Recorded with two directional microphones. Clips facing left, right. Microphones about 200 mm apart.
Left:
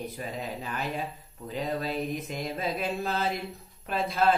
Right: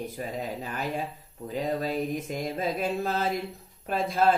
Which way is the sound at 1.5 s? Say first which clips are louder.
Right 2 dB; 45° right (ahead or behind).